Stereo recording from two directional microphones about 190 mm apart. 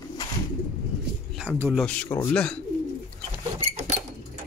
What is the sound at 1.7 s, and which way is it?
Speech, 5° left (ahead or behind).